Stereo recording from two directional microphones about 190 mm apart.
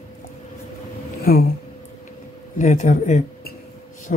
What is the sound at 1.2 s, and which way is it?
Speech, 50° left (ahead or behind).